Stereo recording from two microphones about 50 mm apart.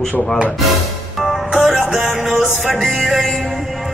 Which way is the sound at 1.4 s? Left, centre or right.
Right.